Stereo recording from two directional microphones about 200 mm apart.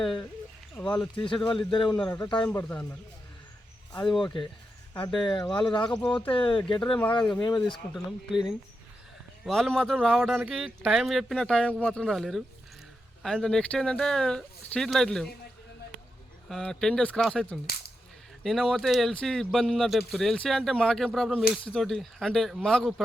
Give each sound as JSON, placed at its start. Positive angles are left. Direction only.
{"t": 0.0, "sound": "speech", "side_deg": 5}
{"t": 1.7, "sound": "speech", "side_deg": 20}
{"t": 2.0, "sound": "speech", "side_deg": 10}
{"t": 3.9, "sound": "speech", "side_deg": 5}
{"t": 5.1, "sound": "speech", "side_deg": 20}
{"t": 6.0, "sound": "speech", "side_deg": 5}
{"t": 6.3, "sound": "speech", "side_deg": 25}
{"t": 6.9, "sound": "speech", "side_deg": 5}
{"t": 7.4, "sound": "speech", "side_deg": 20}
{"t": 7.9, "sound": "speech", "side_deg": 0}
{"t": 16.5, "sound": "speech", "side_deg": 0}